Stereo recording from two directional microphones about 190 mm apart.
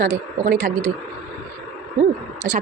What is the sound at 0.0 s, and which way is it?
Speech, 45° right (ahead or behind).